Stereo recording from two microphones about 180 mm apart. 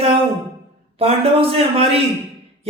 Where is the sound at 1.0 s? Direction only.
35° right (ahead or behind).